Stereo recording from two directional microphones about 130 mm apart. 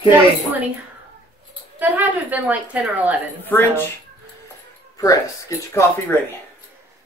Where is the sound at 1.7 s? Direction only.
15° right (ahead or behind).